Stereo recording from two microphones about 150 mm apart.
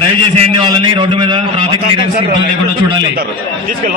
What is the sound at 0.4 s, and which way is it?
A man's voice, 30° right (ahead or behind).